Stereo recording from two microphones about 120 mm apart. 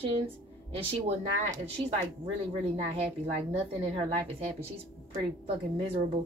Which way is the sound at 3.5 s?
55° right (ahead or behind).